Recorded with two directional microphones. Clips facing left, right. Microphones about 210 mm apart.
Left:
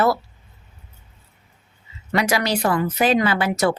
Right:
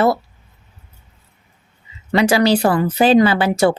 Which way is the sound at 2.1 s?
30° right (ahead or behind).